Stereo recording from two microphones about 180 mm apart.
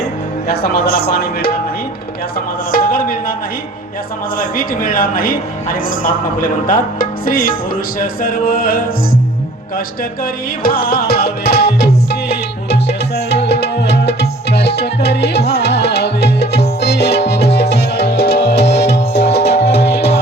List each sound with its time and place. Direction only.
0.4 s music: 60° left (ahead or behind)
2.7 s speech: 55° left (ahead or behind)
4.4 s speech: 50° left (ahead or behind)
10.6 s music: 55° left (ahead or behind)